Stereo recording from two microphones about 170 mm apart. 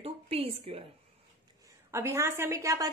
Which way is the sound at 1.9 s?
15° right (ahead or behind).